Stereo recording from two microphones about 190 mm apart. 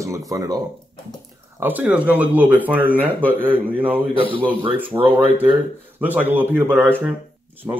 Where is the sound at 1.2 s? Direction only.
10° right (ahead or behind).